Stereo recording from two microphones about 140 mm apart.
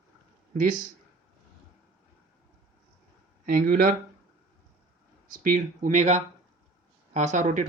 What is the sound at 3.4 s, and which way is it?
Speech, 90° right.